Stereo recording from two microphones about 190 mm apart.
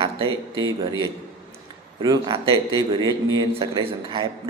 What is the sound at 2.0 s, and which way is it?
Speech, 25° right (ahead or behind).